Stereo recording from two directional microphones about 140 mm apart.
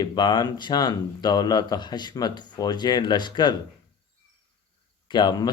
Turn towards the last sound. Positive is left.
turn(degrees=30)  # may be behind; listen again after turning